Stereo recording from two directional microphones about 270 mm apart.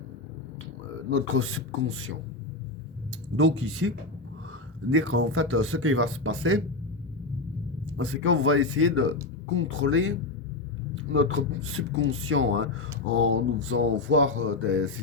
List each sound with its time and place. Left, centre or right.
1.1 s speech: right
3.3 s speech: right
7.9 s speech: right